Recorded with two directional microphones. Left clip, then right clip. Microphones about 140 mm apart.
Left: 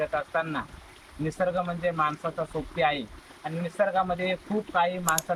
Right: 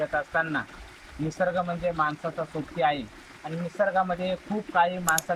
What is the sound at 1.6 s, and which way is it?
Speech, 10° left (ahead or behind).